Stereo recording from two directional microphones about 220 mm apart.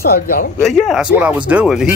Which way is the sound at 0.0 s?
40° left (ahead or behind).